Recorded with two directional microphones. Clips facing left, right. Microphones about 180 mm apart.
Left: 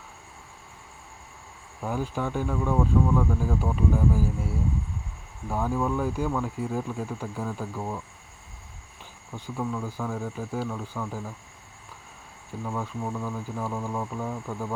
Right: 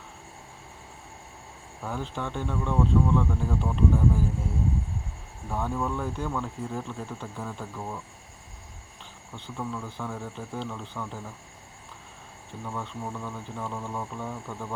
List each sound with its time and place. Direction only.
1.8 s speech: 10° left (ahead or behind)
5.5 s speech: 5° left (ahead or behind)
9.3 s speech: 10° left (ahead or behind)
12.6 s speech: 10° left (ahead or behind)